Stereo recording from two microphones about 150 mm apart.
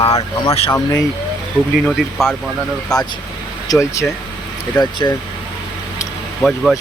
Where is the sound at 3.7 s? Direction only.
20° left (ahead or behind).